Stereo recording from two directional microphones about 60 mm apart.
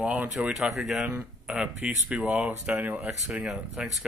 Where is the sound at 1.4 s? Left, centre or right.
Centre.